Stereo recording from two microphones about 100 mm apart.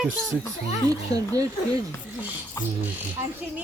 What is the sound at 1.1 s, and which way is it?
Speech, 35° right (ahead or behind).